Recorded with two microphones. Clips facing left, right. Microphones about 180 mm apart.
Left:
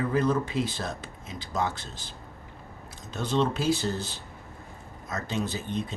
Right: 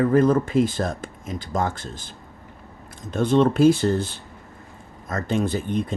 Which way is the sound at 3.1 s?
50° right (ahead or behind).